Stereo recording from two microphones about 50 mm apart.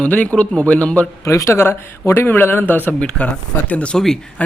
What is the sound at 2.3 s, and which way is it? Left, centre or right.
Speech, left.